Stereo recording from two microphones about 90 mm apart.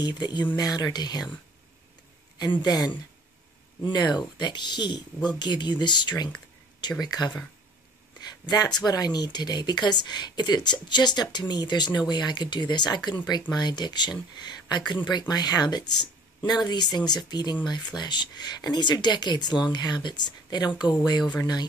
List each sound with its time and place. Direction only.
0.0 s speech: 50° left (ahead or behind)
2.3 s speech: 55° left (ahead or behind)